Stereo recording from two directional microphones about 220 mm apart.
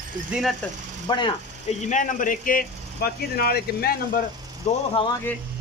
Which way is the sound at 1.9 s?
35° left (ahead or behind).